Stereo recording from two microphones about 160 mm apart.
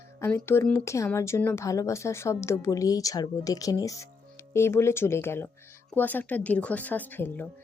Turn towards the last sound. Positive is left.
turn(degrees=10)  # may be behind; listen again after turning